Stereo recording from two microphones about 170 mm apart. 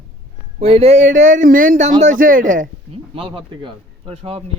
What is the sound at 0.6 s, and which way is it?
Speech, 35° right (ahead or behind).